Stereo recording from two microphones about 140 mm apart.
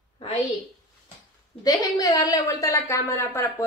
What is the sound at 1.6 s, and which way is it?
A woman's voice, 25° left (ahead or behind).